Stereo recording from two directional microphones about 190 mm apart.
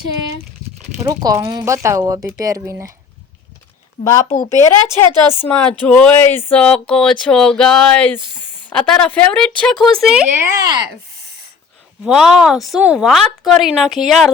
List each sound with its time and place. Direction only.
0.9 s speech: 20° right (ahead or behind)
4.0 s speech: 40° left (ahead or behind)
4.4 s speech: 15° left (ahead or behind)
5.8 s a sound: 10° left (ahead or behind)
10.6 s speech: 20° right (ahead or behind)
12.0 s a sound: centre (ahead or behind)